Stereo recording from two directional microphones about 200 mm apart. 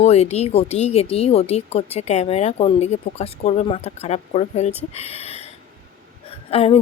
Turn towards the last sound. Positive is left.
turn(degrees=30)  # may be behind; listen again after turning